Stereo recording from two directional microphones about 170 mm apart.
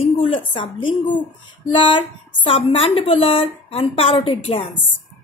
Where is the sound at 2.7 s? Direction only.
35° left (ahead or behind).